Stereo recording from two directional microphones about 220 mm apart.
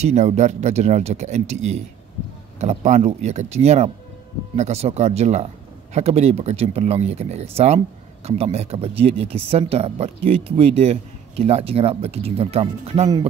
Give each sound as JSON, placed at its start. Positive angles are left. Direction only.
{"t": 0.0, "sound": "speech", "side_deg": -30}